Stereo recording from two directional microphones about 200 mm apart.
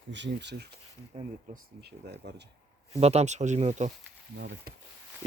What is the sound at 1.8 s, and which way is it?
Speech, 55° right (ahead or behind).